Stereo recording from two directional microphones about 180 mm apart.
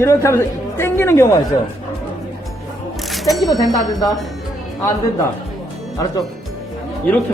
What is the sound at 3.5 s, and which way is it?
Speech, 20° left (ahead or behind).